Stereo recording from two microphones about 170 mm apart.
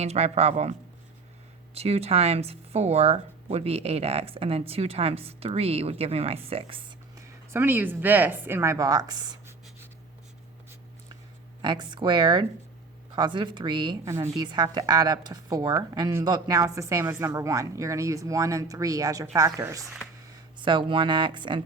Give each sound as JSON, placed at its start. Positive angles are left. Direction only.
{"t": 0.0, "sound": "speech", "side_deg": -40}
{"t": 7.2, "sound": "speech", "side_deg": -15}
{"t": 11.6, "sound": "a woman's voice", "side_deg": -25}